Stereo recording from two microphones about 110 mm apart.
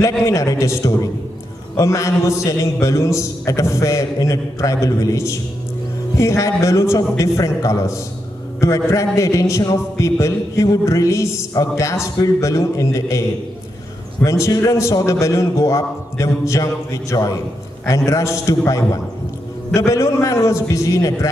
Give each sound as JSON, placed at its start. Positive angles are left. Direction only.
{"t": 0.2, "sound": "a man's voice", "side_deg": 30}
{"t": 14.2, "sound": "a man's voice", "side_deg": 30}
{"t": 19.7, "sound": "a man's voice", "side_deg": 30}